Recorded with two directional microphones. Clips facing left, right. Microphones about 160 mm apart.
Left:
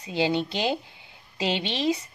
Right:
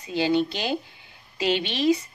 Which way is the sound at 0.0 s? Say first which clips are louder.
Right 3 dB; 25° left (ahead or behind).